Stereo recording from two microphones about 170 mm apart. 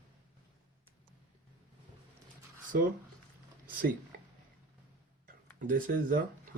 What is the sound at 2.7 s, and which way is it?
Speech, 60° right (ahead or behind).